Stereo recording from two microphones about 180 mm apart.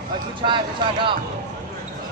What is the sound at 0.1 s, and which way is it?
Speech, 25° right (ahead or behind).